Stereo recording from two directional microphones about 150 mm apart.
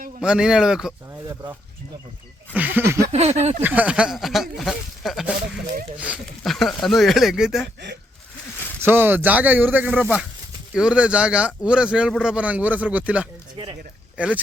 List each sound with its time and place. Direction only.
0.2 s speech: 5° right (ahead or behind)
1.3 s speech: 25° right (ahead or behind)
2.5 s speech: 10° right (ahead or behind)
3.1 s speech: 45° right (ahead or behind)
3.6 s speech: 10° right (ahead or behind)
8.8 s speech: 15° right (ahead or behind)